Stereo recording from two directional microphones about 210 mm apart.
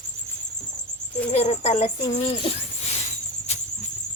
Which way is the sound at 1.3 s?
30° left (ahead or behind).